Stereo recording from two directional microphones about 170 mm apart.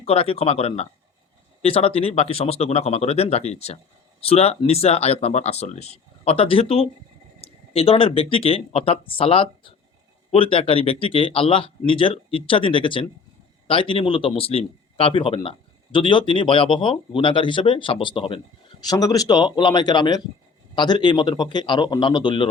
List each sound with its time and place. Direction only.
0.0 s a man's voice: 35° left (ahead or behind)